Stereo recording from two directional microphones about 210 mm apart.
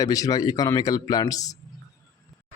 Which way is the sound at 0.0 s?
15° left (ahead or behind).